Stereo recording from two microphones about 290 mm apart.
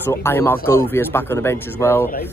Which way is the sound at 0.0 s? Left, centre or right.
Centre.